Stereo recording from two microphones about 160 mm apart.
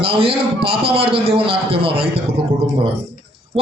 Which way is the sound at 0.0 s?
35° right (ahead or behind).